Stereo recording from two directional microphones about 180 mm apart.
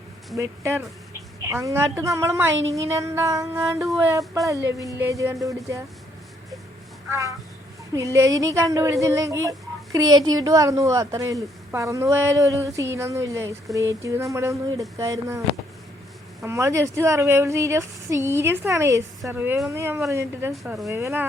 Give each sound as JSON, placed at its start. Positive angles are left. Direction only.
{"t": 0.3, "sound": "speech", "side_deg": -15}
{"t": 7.1, "sound": "speech", "side_deg": -15}
{"t": 16.4, "sound": "speech", "side_deg": -15}
{"t": 20.5, "sound": "speech", "side_deg": 0}
{"t": 20.8, "sound": "speech", "side_deg": -15}